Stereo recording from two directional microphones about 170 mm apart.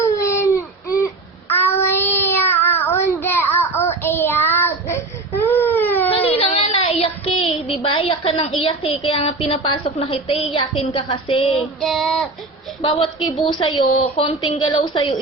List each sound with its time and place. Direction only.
0.0 s baby cry: 15° left (ahead or behind)
1.5 s child singing: 15° left (ahead or behind)
6.1 s child singing: 35° left (ahead or behind)
8.6 s a woman's voice: 35° left (ahead or behind)
11.8 s child singing: centre (ahead or behind)
12.8 s a woman's voice: 30° left (ahead or behind)